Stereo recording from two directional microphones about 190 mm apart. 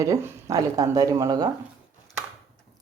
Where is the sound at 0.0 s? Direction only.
15° right (ahead or behind).